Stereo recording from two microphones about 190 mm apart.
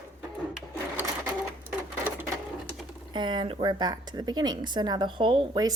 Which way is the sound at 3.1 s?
25° right (ahead or behind).